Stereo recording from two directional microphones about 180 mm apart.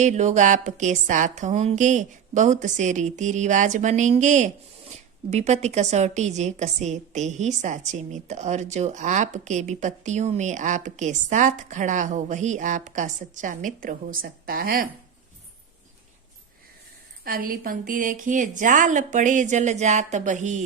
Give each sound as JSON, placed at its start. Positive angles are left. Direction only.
{"t": 0.0, "sound": "speech", "side_deg": -40}
{"t": 17.2, "sound": "speech", "side_deg": -55}